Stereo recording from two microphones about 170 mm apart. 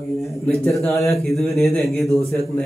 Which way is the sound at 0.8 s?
15° left (ahead or behind).